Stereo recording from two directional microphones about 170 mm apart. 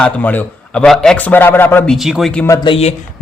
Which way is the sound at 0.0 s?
10° left (ahead or behind).